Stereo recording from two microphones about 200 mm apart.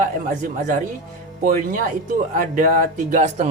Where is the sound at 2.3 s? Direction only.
40° right (ahead or behind).